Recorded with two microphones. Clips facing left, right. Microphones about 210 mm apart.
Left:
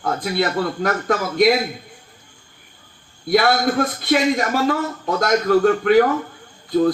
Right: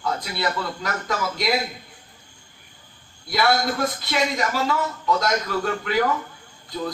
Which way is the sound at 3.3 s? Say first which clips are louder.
Left 5 dB; 50° left (ahead or behind).